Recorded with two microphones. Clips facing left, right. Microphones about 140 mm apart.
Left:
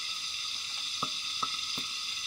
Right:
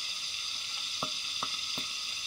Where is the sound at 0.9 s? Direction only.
20° right (ahead or behind).